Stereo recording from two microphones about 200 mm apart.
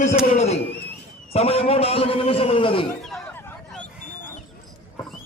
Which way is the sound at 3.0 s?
5° left (ahead or behind).